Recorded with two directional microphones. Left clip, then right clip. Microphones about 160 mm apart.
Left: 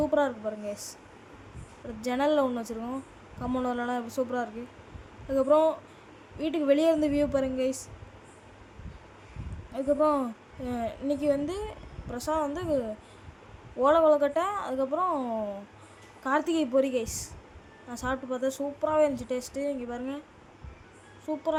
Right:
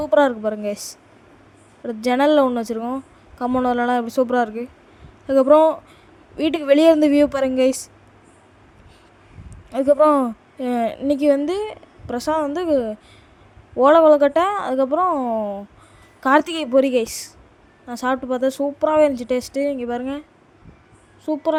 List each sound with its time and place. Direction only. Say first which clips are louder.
0.0 s a woman's voice: right 10 dB; 50° right (ahead or behind)
2.0 s a woman's voice: right 10 dB; 50° right (ahead or behind)
9.7 s a woman's voice: right 11 dB; 55° right (ahead or behind); by 15.5 s 30° right (ahead or behind)
16.2 s a woman's voice: right 10 dB; 50° right (ahead or behind)
21.3 s a woman's voice: right 9 dB; 40° right (ahead or behind)